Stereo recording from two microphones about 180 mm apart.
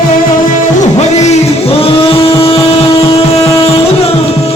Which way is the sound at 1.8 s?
30° left (ahead or behind).